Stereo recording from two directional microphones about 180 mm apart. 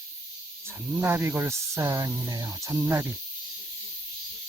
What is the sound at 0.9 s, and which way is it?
Speech, 10° right (ahead or behind).